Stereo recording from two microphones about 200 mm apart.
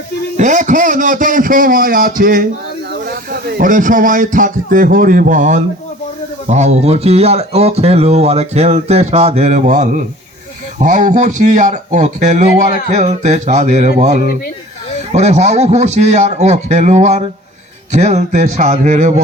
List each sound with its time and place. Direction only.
0.3 s speech: 40° right (ahead or behind)
3.6 s speech: 40° right (ahead or behind)